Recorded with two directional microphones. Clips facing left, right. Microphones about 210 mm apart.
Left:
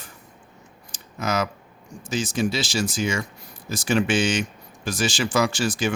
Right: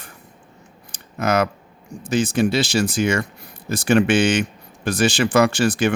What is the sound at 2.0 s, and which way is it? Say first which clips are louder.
Speech: right 6 dB; 60° right (ahead or behind).